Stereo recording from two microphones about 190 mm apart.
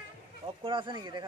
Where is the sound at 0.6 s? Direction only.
25° right (ahead or behind).